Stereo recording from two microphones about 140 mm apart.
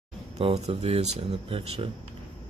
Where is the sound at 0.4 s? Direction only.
45° right (ahead or behind).